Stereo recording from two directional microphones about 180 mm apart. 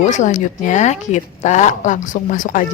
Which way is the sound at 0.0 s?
45° left (ahead or behind).